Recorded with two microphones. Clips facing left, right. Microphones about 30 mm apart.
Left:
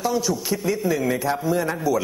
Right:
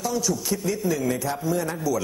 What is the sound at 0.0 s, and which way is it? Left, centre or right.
A man's voice, left.